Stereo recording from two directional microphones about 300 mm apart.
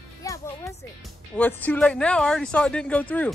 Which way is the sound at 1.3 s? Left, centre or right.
Centre.